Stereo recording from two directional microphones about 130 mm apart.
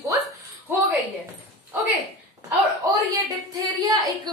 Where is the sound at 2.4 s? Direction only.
25° right (ahead or behind).